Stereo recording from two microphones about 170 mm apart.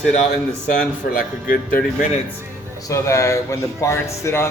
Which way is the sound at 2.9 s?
20° left (ahead or behind).